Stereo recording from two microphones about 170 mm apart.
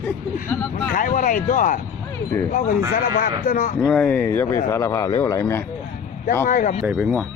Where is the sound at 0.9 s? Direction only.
55° left (ahead or behind).